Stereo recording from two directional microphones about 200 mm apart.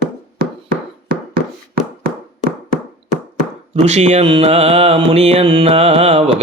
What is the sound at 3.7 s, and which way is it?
Mantra, 35° right (ahead or behind).